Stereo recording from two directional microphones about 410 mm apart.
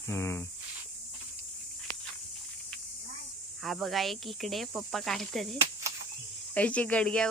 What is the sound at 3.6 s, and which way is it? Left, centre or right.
Speech, centre.